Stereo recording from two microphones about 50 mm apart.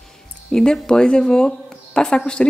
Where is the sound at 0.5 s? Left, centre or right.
Centre.